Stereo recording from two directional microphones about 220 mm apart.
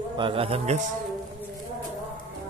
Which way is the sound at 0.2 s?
25° right (ahead or behind).